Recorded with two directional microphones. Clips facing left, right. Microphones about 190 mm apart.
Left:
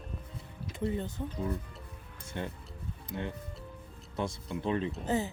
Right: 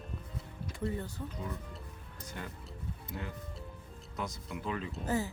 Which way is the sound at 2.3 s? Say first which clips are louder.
Left 6 dB; 25° left (ahead or behind).